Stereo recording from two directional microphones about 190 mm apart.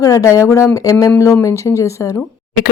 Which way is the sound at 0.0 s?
15° left (ahead or behind).